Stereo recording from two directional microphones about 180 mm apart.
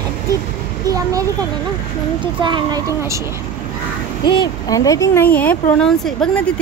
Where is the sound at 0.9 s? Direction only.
20° right (ahead or behind).